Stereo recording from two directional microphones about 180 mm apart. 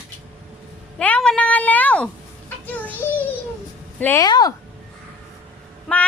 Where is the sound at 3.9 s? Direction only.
10° left (ahead or behind).